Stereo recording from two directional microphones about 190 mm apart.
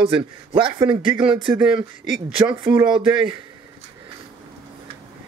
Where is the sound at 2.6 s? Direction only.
20° right (ahead or behind).